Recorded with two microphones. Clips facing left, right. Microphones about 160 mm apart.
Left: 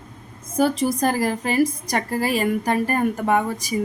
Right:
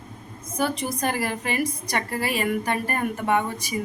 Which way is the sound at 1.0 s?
40° left (ahead or behind).